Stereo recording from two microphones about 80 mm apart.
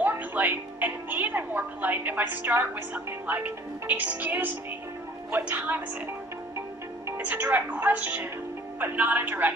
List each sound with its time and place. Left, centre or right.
0.0 s music: right
3.1 s speech: right
7.2 s speech: right